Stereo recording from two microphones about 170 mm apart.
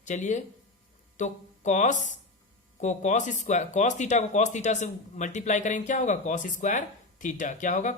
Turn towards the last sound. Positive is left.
turn(degrees=45)  # may be behind; listen again after turning